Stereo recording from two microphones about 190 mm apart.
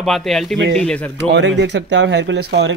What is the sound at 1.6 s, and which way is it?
Speech, 70° right (ahead or behind).